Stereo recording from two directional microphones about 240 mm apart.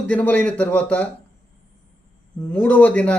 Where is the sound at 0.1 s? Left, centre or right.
Centre.